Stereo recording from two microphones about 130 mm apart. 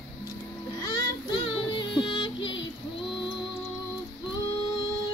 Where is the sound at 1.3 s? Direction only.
40° left (ahead or behind).